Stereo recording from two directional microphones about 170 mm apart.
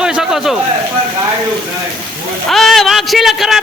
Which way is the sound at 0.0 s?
5° right (ahead or behind).